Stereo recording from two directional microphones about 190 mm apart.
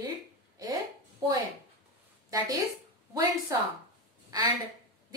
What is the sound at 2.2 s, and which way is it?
A woman's voice, 20° right (ahead or behind).